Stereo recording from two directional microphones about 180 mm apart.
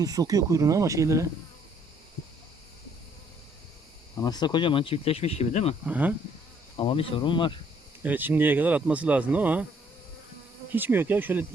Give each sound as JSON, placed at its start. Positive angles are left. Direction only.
{"t": 0.0, "sound": "insect", "side_deg": -20}
{"t": 4.2, "sound": "speech", "side_deg": 20}
{"t": 5.8, "sound": "insect", "side_deg": -10}
{"t": 6.7, "sound": "speech", "side_deg": 30}
{"t": 8.0, "sound": "insect", "side_deg": -10}
{"t": 10.7, "sound": "insect", "side_deg": -10}